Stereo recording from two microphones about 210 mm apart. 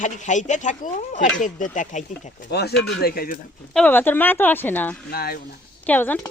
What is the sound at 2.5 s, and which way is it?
Speech, 50° left (ahead or behind).